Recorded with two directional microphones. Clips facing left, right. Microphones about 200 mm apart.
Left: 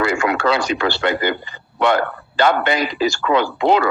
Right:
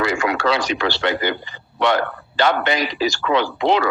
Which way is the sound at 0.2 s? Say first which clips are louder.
Left 2 dB; 50° left (ahead or behind).